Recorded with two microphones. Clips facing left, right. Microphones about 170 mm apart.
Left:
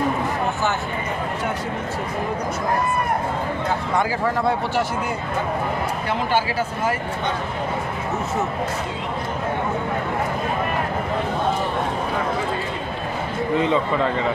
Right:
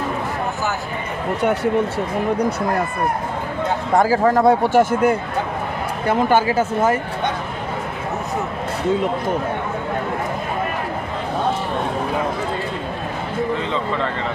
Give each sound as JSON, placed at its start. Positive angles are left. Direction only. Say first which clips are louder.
{"t": 3.9, "sound": "speech", "louder": "right 9 dB", "side_deg": -45}